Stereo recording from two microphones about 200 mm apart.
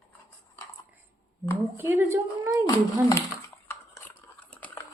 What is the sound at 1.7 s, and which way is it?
Speech, 10° right (ahead or behind).